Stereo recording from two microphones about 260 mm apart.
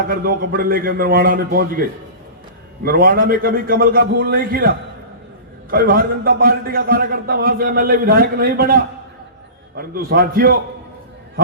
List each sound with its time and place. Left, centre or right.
0.1 s a man's voice: right
2.8 s a man's voice: right
5.7 s a man's voice: right